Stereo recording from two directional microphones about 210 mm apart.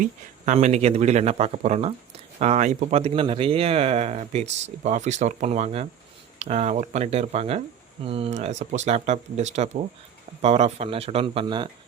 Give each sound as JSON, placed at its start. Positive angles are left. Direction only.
{"t": 0.0, "sound": "speech", "side_deg": -35}